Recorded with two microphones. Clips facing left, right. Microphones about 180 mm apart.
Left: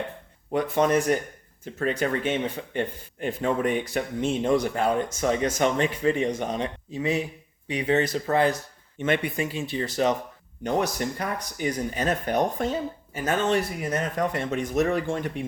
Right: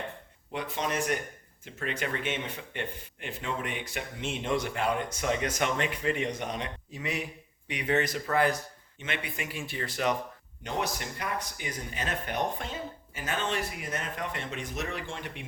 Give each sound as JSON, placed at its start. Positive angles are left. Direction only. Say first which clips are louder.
{"t": 0.5, "sound": "speech", "louder": "left 10 dB", "side_deg": 50}
{"t": 1.6, "sound": "speech", "louder": "left 8 dB", "side_deg": 40}
{"t": 9.0, "sound": "speech", "louder": "left 12 dB", "side_deg": 45}
{"t": 9.4, "sound": "speech", "louder": "left 8 dB", "side_deg": 25}
{"t": 9.8, "sound": "speech", "louder": "left 5 dB", "side_deg": 40}